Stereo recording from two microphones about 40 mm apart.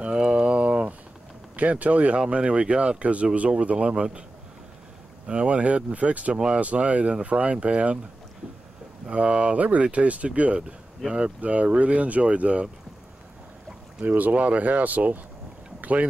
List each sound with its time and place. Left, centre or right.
0.0 s a sound: right
1.6 s speech: right
3.7 s speech: right
5.2 s speech: right
6.3 s speech: right
6.6 s speech: right
9.0 s speech: right
14.0 s speech: right
15.8 s boat: right